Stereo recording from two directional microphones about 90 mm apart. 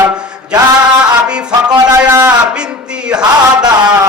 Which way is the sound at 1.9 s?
30° right (ahead or behind).